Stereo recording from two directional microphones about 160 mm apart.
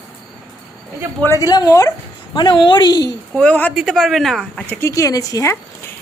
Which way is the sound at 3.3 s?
10° left (ahead or behind).